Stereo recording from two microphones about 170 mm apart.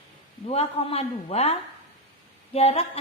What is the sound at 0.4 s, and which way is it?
A woman's voice, 35° left (ahead or behind).